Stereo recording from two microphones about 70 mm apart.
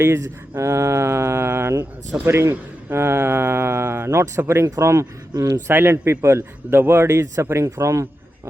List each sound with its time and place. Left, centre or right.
0.0 s speech: right